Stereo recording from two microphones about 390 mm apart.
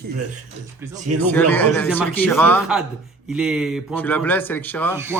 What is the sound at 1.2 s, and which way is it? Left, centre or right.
A man's voice, centre.